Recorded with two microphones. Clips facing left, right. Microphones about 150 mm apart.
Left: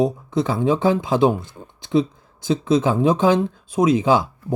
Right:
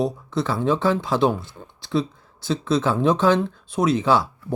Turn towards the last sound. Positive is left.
turn(degrees=15)  # may be behind; listen again after turning